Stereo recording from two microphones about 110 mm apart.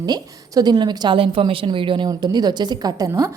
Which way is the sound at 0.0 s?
40° right (ahead or behind).